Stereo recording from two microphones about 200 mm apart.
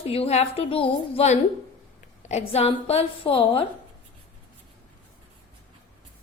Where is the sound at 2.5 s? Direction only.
30° left (ahead or behind).